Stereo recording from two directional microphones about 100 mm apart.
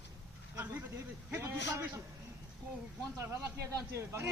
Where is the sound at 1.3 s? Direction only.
25° right (ahead or behind).